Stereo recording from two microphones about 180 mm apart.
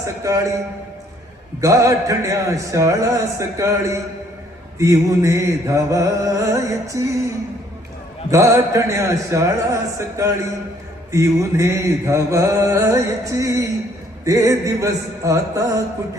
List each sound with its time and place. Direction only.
0.0 s mantra: 15° right (ahead or behind)
1.6 s mantra: 20° right (ahead or behind)
8.3 s mantra: 15° right (ahead or behind)